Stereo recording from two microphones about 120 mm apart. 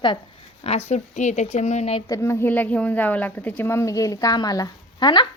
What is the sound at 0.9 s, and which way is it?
Speech, 75° left (ahead or behind).